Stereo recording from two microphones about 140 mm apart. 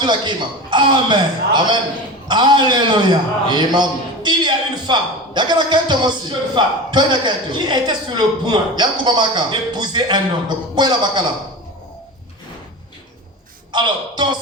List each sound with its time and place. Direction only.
0.0 s a man's voice: 35° right (ahead or behind)
13.7 s a man's voice: 35° right (ahead or behind)